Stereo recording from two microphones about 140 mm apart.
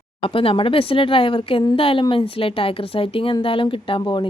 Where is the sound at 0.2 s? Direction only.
40° left (ahead or behind).